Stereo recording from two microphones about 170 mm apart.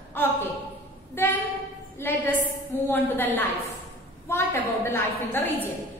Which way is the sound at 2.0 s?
10° left (ahead or behind).